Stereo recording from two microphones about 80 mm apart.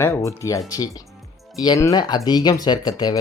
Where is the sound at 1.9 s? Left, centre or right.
Left.